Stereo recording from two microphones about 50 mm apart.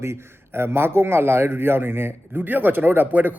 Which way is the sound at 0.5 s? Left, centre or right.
Right.